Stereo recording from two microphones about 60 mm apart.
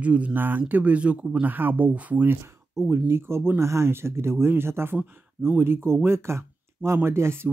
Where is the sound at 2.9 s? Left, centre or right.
Right.